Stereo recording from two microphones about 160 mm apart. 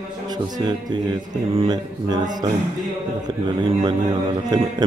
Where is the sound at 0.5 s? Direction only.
25° right (ahead or behind).